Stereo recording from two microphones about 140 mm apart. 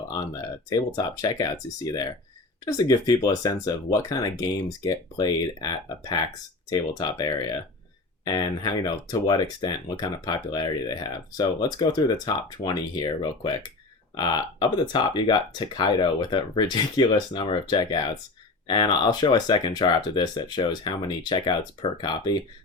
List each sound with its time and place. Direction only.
0.7 s speech: 30° left (ahead or behind)